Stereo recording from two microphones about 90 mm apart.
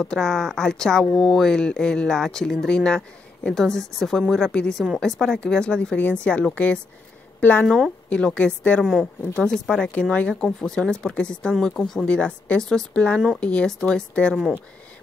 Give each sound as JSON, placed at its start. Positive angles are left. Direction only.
{"t": 0.0, "sound": "a woman's voice", "side_deg": 5}
{"t": 7.6, "sound": "a woman's voice", "side_deg": 0}
{"t": 8.1, "sound": "speech", "side_deg": 15}